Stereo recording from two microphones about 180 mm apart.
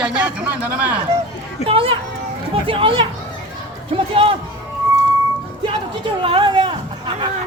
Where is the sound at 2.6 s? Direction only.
30° right (ahead or behind).